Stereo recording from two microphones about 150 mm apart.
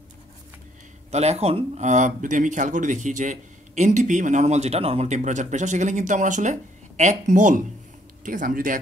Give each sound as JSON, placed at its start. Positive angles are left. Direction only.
{"t": 1.1, "sound": "speech", "side_deg": -45}